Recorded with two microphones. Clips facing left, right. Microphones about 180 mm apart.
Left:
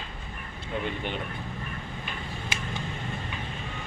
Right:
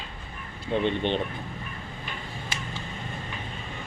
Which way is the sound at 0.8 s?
25° right (ahead or behind).